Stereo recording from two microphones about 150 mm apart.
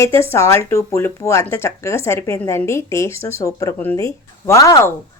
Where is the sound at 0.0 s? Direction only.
15° left (ahead or behind).